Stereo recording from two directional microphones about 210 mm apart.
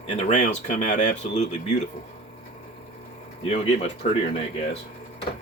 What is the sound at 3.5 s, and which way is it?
Speech, 30° left (ahead or behind).